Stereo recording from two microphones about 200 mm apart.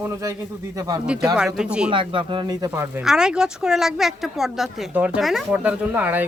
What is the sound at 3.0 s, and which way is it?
Speech, 5° right (ahead or behind).